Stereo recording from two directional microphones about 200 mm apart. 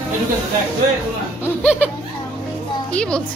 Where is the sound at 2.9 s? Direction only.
5° left (ahead or behind).